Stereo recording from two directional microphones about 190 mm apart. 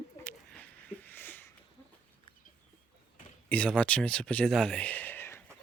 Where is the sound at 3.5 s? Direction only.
5° left (ahead or behind).